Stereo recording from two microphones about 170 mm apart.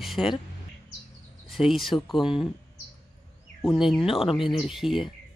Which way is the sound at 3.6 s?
Centre (ahead or behind).